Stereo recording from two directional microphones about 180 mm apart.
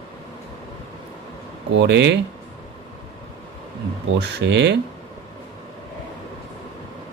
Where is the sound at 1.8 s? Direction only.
70° right (ahead or behind).